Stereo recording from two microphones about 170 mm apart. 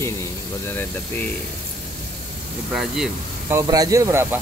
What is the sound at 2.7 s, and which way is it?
Speech, centre (ahead or behind).